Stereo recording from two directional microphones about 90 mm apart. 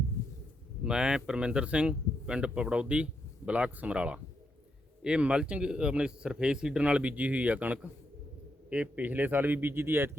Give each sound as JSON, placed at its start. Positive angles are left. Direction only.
{"t": 0.9, "sound": "a man's voice", "side_deg": -10}